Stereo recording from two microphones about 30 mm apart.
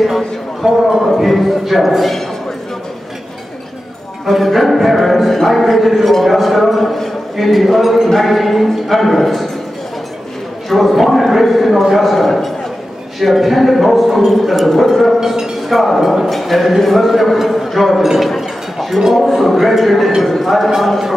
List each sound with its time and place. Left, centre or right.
0.0 s a man's voice: centre
4.3 s a man's voice: centre
10.7 s a man's voice: centre
15.1 s speech: centre
15.7 s a man's voice: centre
18.1 s a sound: centre
19.1 s a man's voice: centre
20.2 s a man's voice: centre